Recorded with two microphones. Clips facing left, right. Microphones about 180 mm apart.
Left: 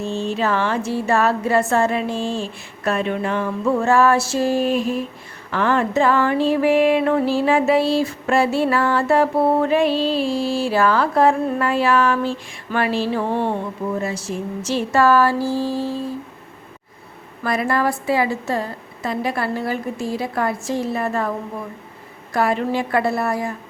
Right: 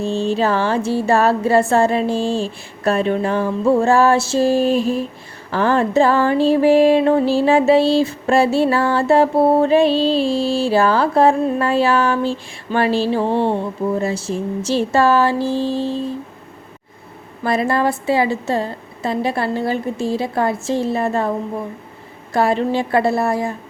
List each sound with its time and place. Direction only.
0.0 s a sound: 30° right (ahead or behind)
5.5 s music: 35° right (ahead or behind)
17.4 s music: 25° right (ahead or behind)